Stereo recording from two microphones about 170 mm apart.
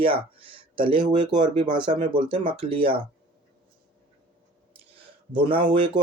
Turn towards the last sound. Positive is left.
turn(degrees=-30)  # may be behind; listen again after turning